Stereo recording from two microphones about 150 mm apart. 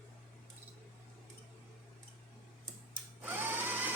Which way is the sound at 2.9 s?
10° right (ahead or behind).